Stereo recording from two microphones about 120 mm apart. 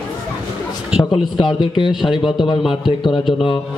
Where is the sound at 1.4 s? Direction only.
40° left (ahead or behind).